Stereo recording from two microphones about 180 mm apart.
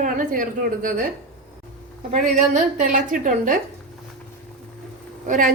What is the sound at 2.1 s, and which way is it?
A woman's voice, 45° right (ahead or behind).